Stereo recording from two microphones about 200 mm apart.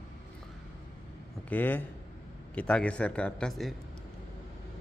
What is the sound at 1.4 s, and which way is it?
A man's voice, 10° left (ahead or behind).